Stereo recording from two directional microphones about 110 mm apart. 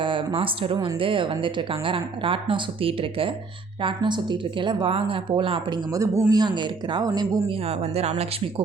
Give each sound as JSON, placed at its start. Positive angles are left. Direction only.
{"t": 0.0, "sound": "speech", "side_deg": -50}
{"t": 7.5, "sound": "speech", "side_deg": -70}